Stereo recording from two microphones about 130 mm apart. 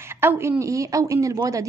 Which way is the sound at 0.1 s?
20° right (ahead or behind).